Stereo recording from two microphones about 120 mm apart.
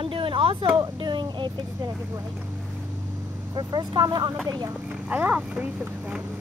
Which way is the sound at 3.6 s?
35° right (ahead or behind).